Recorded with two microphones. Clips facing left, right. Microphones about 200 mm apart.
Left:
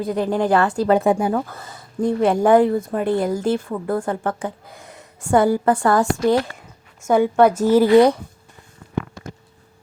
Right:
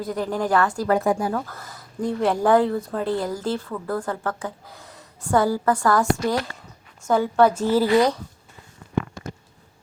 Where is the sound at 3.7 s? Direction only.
25° left (ahead or behind).